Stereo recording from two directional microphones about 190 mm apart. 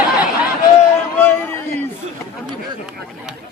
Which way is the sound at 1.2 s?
10° left (ahead or behind).